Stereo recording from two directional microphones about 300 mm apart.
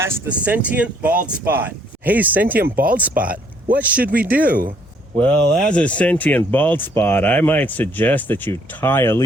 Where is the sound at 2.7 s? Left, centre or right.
Right.